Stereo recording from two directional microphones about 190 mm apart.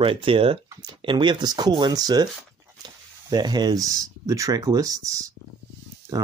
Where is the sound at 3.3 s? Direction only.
20° right (ahead or behind).